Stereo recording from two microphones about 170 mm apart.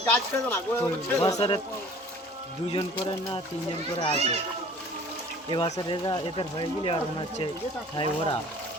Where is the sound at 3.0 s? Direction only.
25° left (ahead or behind).